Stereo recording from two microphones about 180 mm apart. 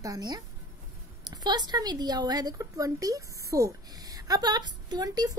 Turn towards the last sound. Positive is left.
turn(degrees=-20)  # may be behind; listen again after turning